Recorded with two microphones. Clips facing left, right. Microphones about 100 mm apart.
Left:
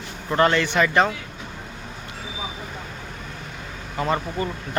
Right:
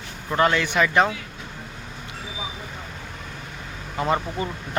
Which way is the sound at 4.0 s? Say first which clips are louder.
Even; 10° right (ahead or behind).